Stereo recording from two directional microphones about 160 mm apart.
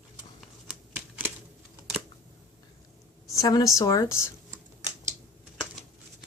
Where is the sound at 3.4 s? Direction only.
20° left (ahead or behind).